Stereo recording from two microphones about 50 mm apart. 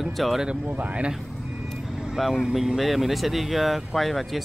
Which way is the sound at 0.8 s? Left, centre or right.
Right.